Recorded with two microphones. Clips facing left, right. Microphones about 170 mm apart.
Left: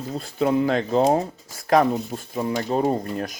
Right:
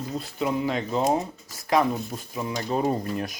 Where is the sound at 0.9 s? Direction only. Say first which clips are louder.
Left 5 dB; 30° left (ahead or behind).